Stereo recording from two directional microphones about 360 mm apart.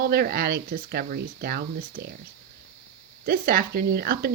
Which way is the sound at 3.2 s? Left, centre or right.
Right.